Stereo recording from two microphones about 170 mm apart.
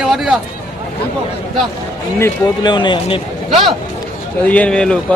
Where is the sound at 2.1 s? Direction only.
20° left (ahead or behind).